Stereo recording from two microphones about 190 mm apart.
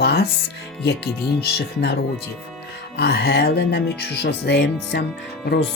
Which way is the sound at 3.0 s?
60° left (ahead or behind).